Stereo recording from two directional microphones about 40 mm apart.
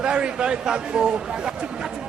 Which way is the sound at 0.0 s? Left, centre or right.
Right.